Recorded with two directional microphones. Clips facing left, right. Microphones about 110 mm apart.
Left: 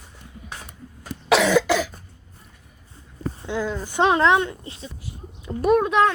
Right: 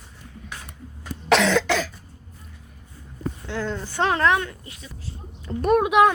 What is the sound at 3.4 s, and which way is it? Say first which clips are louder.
Speech: left 3 dB; 15° left (ahead or behind).